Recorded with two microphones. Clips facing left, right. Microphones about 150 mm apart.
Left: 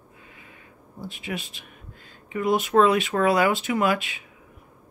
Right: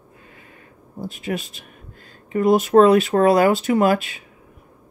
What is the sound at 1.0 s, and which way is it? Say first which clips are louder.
Speech: right 6 dB; 40° right (ahead or behind).